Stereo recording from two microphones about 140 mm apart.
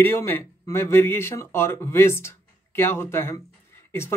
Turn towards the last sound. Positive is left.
turn(degrees=20)  # may be behind; listen again after turning